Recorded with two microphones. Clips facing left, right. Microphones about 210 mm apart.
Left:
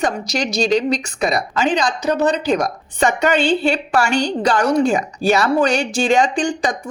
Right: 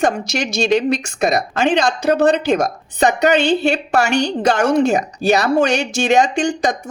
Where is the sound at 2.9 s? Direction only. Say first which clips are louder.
Right 2 dB; 40° right (ahead or behind).